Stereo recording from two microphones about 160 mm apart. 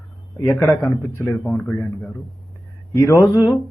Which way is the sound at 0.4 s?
10° left (ahead or behind).